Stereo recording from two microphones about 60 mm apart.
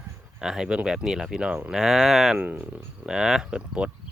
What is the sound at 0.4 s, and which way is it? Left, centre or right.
Speech, centre.